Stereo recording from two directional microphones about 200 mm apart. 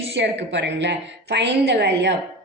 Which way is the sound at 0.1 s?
60° right (ahead or behind).